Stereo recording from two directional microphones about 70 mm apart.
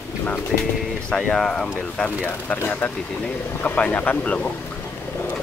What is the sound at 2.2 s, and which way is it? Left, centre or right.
Speech, left.